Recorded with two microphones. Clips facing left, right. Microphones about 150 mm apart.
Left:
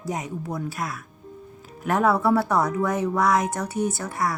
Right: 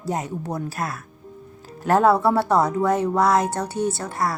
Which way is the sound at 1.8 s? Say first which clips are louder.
Right 4 dB; 30° right (ahead or behind).